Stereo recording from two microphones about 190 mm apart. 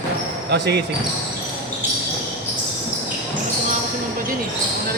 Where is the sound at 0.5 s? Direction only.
65° right (ahead or behind).